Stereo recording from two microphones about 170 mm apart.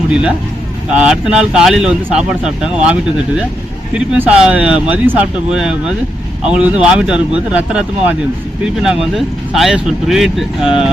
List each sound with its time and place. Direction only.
0.1 s speech: 5° right (ahead or behind)